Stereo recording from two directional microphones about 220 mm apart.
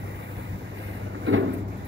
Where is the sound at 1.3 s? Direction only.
60° right (ahead or behind).